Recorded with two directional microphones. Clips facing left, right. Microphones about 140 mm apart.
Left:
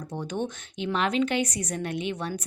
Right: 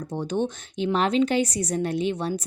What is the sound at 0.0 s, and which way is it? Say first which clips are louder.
A woman's voice: right 5 dB; 30° right (ahead or behind).